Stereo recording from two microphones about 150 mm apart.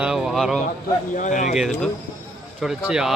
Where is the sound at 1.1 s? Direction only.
55° left (ahead or behind).